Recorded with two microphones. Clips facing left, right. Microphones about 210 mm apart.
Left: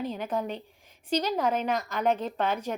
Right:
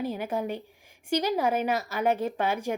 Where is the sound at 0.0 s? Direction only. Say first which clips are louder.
Right 1 dB; 10° right (ahead or behind).